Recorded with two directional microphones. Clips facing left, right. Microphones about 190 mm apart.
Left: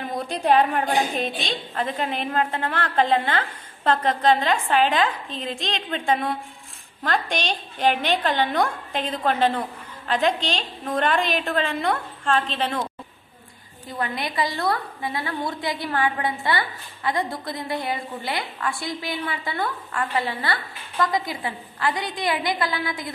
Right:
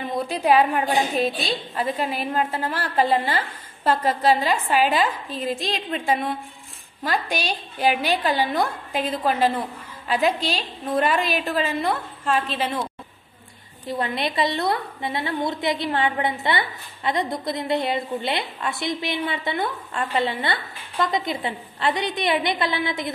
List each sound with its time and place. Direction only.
0.0 s a woman's voice: centre (ahead or behind)
13.9 s a woman's voice: 25° right (ahead or behind)